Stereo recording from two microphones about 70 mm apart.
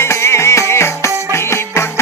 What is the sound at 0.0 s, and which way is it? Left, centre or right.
Music, left.